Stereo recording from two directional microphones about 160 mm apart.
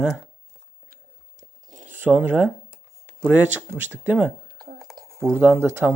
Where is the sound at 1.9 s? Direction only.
10° right (ahead or behind).